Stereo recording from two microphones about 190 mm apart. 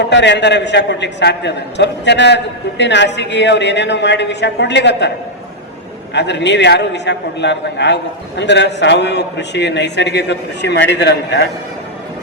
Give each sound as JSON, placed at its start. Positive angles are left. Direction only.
{"t": 0.0, "sound": "a man's voice", "side_deg": 70}
{"t": 6.1, "sound": "a man's voice", "side_deg": 65}